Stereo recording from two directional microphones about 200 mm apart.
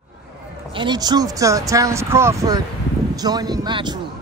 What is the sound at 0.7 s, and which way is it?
Speech, 25° right (ahead or behind).